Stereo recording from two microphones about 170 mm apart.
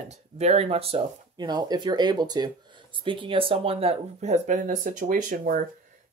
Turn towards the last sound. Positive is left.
turn(degrees=-50)  # may be behind; listen again after turning